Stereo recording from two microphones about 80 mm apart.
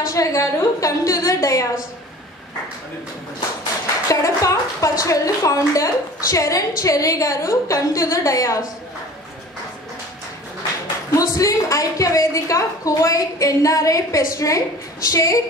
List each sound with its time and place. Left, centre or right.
0.1 s a woman's voice: left
4.1 s a woman's voice: left
11.1 s a woman's voice: left